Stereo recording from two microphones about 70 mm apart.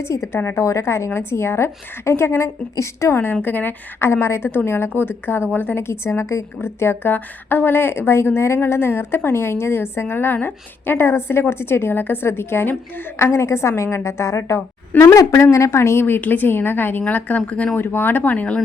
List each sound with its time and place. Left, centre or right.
0.0 s a woman's voice: left
3.4 s a woman's voice: left
17.7 s speech: left